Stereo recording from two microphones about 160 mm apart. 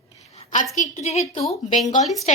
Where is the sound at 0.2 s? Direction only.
45° left (ahead or behind).